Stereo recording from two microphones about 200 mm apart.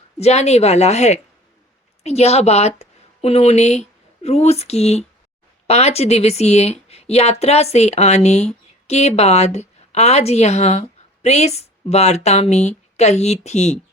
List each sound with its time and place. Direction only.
0.2 s a woman's voice: 35° left (ahead or behind)